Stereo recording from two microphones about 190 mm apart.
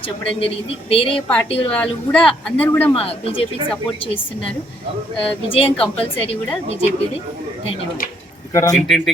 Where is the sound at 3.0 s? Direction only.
30° left (ahead or behind).